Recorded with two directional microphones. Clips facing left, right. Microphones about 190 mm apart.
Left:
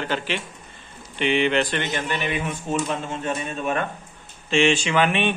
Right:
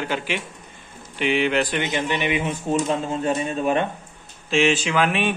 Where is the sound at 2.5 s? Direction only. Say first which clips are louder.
Right 3 dB; 35° right (ahead or behind).